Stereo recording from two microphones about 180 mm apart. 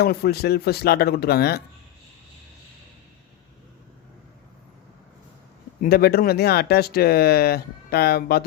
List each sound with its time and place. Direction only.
0.0 s speech: 60° left (ahead or behind)
5.8 s speech: 60° left (ahead or behind)